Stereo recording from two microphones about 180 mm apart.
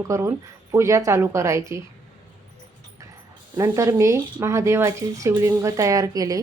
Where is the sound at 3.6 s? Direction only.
15° right (ahead or behind).